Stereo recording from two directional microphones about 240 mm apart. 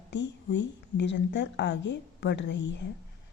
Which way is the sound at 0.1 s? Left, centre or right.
Left.